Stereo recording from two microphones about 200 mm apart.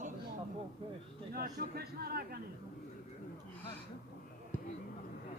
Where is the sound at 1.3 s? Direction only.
50° right (ahead or behind).